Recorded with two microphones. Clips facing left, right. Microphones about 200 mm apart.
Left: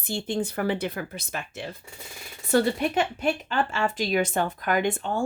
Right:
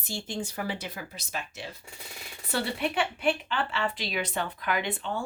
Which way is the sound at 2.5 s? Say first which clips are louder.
Left 7 dB; 45° left (ahead or behind).